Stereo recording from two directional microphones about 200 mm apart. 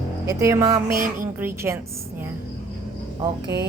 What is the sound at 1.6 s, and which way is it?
Speech, 15° right (ahead or behind).